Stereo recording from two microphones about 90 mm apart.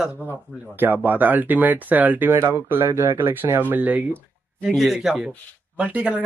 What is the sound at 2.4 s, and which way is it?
Speech, 30° right (ahead or behind).